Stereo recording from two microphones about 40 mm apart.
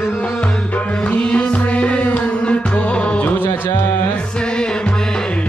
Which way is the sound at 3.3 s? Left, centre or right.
Left.